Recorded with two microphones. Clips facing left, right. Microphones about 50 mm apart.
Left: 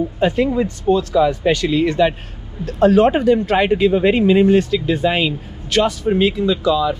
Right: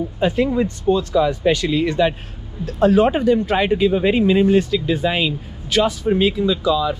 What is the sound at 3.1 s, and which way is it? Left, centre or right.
Speech, left.